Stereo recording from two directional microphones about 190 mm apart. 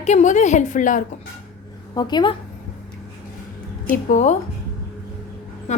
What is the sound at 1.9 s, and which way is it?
Speech, 20° left (ahead or behind).